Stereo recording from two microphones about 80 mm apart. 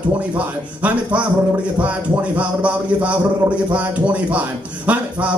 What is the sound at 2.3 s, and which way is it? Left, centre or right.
A man's voice, centre.